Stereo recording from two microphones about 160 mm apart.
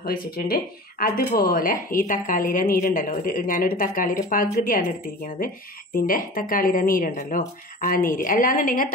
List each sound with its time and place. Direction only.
0.0 s a woman's voice: 70° left (ahead or behind)